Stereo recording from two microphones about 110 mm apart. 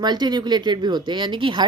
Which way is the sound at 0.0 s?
40° right (ahead or behind).